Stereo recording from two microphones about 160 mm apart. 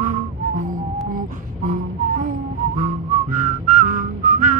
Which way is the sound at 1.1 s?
55° right (ahead or behind).